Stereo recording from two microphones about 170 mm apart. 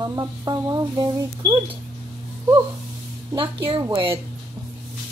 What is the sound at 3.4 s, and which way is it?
Speech, 30° right (ahead or behind).